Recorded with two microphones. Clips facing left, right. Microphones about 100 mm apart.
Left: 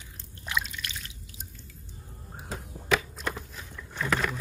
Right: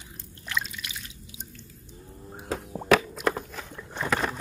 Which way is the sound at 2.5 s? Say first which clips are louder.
Right 6 dB; 65° right (ahead or behind).